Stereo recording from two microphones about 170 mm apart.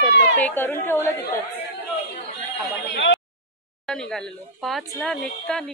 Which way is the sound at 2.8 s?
90° left.